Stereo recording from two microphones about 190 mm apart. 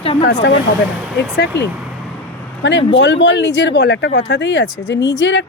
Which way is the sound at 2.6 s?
65° left (ahead or behind).